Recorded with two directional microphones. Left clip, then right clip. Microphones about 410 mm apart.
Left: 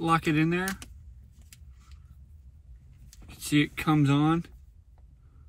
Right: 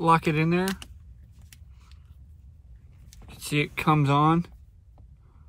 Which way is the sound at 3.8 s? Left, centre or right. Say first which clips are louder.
Right 4 dB; right.